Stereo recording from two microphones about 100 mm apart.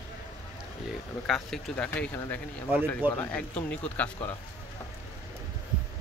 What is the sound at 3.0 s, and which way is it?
Speech, 20° right (ahead or behind).